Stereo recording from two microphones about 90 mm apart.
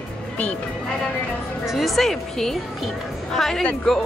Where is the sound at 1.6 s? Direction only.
Centre (ahead or behind).